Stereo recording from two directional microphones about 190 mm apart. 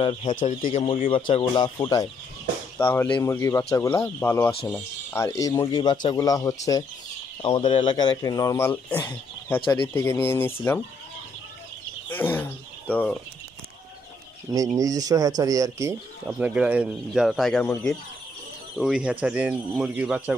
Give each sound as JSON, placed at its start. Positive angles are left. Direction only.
{"t": 0.0, "sound": "speech", "side_deg": 25}
{"t": 0.4, "sound": "speech", "side_deg": 45}
{"t": 0.7, "sound": "speech", "side_deg": 30}
{"t": 12.1, "sound": "a sound", "side_deg": 10}
{"t": 14.5, "sound": "speech", "side_deg": -20}
{"t": 16.3, "sound": "speech", "side_deg": -5}